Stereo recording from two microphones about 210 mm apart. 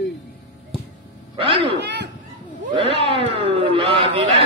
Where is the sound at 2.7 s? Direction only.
25° right (ahead or behind).